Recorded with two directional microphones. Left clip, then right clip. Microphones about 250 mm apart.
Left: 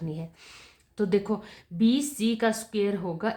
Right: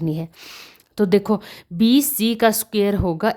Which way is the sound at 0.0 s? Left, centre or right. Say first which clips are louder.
Right 11 dB; right.